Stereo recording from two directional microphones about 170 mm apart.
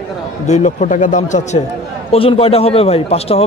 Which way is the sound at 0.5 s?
40° left (ahead or behind).